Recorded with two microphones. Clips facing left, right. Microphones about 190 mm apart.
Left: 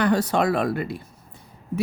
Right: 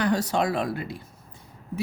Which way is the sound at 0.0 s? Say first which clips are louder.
Left 3 dB; 60° left (ahead or behind).